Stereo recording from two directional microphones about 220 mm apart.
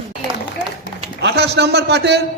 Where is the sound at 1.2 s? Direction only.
50° right (ahead or behind).